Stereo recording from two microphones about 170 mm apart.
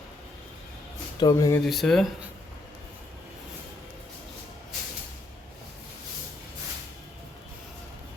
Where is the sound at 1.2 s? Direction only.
20° left (ahead or behind).